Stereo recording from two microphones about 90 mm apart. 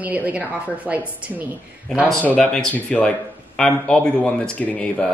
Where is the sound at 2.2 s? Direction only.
15° left (ahead or behind).